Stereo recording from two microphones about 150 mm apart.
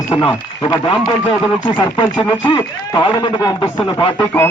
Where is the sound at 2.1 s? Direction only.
35° left (ahead or behind).